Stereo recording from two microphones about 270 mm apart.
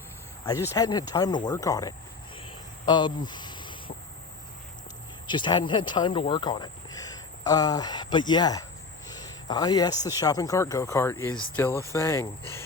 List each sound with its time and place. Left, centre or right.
0.4 s speech: centre
2.8 s cricket: centre
5.3 s speech: centre